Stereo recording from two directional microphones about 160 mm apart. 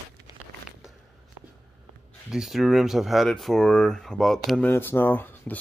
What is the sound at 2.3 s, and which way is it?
Speech, centre (ahead or behind).